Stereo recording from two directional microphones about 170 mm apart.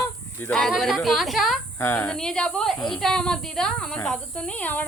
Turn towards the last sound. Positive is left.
turn(degrees=10)  # may be behind; listen again after turning